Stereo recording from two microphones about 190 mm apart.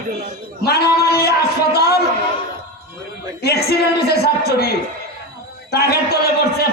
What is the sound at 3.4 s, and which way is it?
A man's voice, 55° left (ahead or behind).